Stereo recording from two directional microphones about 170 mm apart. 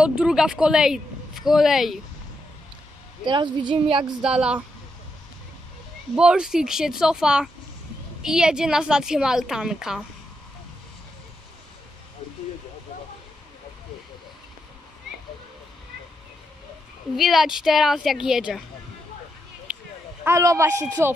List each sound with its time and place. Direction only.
0.0 s speech: 5° right (ahead or behind)
3.3 s a woman's voice: 30° right (ahead or behind)
4.2 s speech: 5° right (ahead or behind)
6.1 s speech: 5° right (ahead or behind)
17.2 s speech: centre (ahead or behind)
19.7 s a sound: 10° right (ahead or behind)
20.2 s a man's voice: 15° right (ahead or behind)